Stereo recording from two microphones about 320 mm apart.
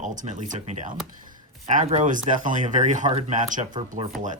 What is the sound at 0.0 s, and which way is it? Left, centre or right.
Speech, right.